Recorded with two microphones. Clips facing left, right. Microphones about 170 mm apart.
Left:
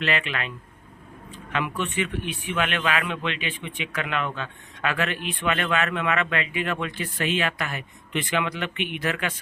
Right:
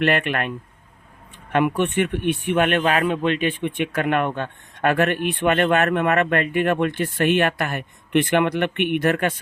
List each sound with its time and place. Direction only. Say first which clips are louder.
0.0 s speech: right 7 dB; 55° right (ahead or behind)
1.5 s speech: right 8 dB; 55° right (ahead or behind)